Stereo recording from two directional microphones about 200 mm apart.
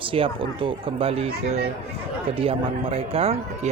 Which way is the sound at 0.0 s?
25° right (ahead or behind).